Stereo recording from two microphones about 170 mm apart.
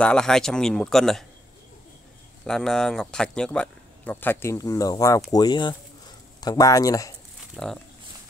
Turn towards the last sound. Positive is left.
turn(degrees=5)  # may be behind; listen again after turning